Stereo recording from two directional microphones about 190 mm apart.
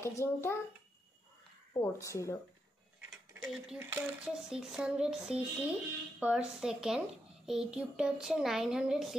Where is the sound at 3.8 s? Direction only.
10° right (ahead or behind).